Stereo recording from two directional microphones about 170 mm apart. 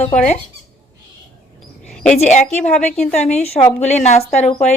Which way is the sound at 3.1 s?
40° left (ahead or behind).